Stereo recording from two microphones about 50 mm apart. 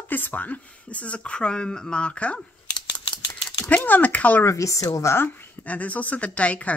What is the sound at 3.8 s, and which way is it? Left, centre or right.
Speech, left.